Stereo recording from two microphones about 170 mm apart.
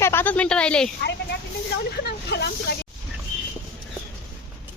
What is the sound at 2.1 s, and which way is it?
Speech, 85° left.